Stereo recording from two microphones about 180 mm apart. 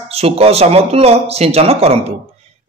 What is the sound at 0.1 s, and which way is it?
Speech, 35° right (ahead or behind).